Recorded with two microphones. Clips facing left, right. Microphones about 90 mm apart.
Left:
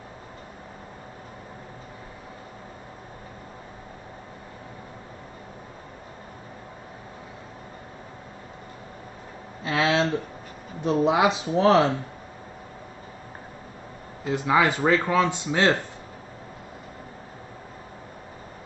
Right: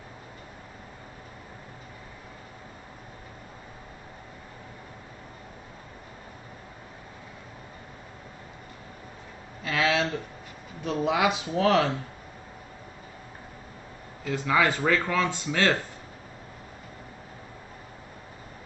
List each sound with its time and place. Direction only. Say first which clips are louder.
9.6 s a sound: left 3 dB; 25° left (ahead or behind)
10.8 s speech: left 4 dB; 25° left (ahead or behind)
14.2 s speech: left 3 dB; 20° left (ahead or behind)